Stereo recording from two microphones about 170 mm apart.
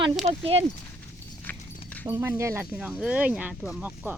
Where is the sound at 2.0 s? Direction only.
15° right (ahead or behind).